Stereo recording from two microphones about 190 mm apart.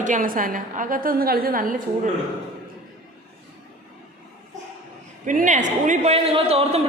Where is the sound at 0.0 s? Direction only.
45° right (ahead or behind).